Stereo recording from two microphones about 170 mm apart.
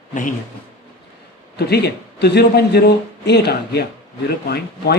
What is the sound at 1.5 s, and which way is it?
A man's voice, 70° left (ahead or behind).